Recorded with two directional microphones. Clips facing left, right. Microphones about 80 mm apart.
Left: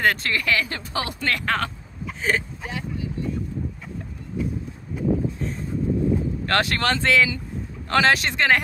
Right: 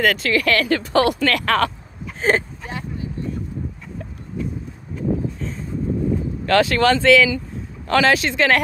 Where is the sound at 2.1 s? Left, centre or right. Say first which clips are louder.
Right 5 dB; right.